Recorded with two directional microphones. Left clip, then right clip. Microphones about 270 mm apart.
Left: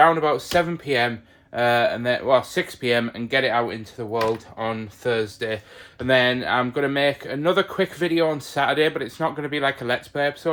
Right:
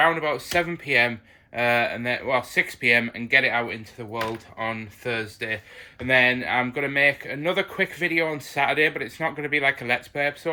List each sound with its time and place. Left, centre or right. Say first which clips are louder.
0.0 s speech: left 4 dB; centre